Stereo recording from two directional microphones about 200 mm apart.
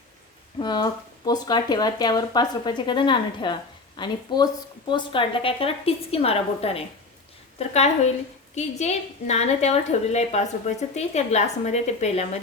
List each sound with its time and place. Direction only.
0.6 s a woman's voice: 20° left (ahead or behind)